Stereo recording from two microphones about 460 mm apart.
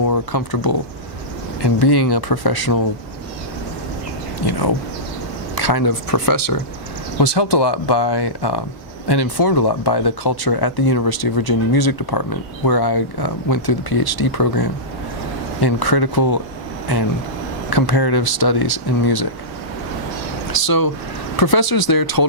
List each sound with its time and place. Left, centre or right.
0.0 s speech: left
4.4 s speech: left
7.2 s speech: left
20.5 s speech: left